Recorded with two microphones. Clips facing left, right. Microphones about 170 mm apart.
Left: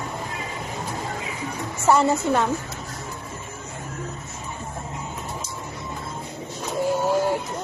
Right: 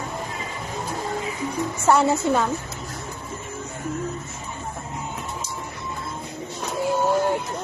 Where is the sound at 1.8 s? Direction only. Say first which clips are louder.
Even; centre (ahead or behind).